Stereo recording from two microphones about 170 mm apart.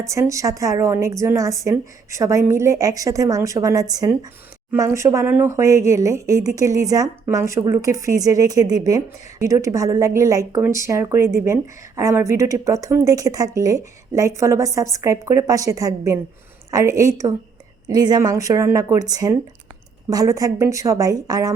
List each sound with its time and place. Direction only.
0.1 s a woman's voice: 20° right (ahead or behind)